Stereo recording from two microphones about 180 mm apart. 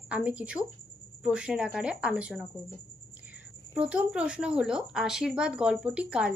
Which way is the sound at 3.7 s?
5° right (ahead or behind).